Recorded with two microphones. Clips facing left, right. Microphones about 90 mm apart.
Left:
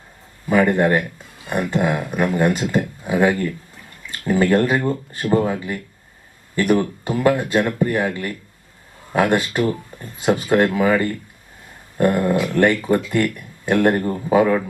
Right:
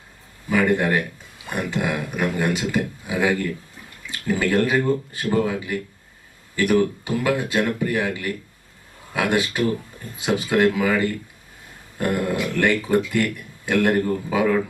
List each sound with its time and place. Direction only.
0.5 s speech: 45° left (ahead or behind)